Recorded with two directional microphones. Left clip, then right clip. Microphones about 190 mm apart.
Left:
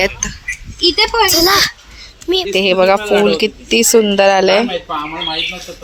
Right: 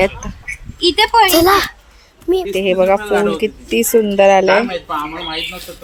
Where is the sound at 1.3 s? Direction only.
25° right (ahead or behind).